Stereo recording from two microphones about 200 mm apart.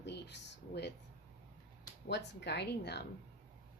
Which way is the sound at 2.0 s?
60° left (ahead or behind).